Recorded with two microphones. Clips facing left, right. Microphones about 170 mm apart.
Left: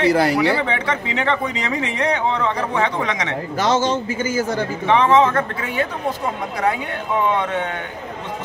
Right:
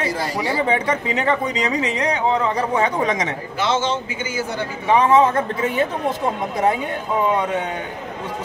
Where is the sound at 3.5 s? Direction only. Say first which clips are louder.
Left 3 dB; 40° left (ahead or behind).